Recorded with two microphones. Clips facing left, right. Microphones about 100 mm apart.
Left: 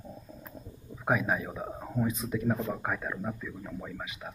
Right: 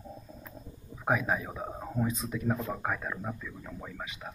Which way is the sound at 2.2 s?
Centre (ahead or behind).